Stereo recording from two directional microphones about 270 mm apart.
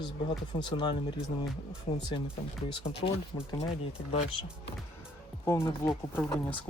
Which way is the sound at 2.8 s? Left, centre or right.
Left.